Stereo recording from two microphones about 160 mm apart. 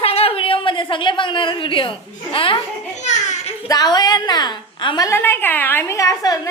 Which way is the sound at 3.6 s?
25° left (ahead or behind).